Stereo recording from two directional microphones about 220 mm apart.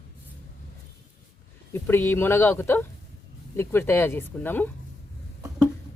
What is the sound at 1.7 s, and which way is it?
Speech, 10° left (ahead or behind).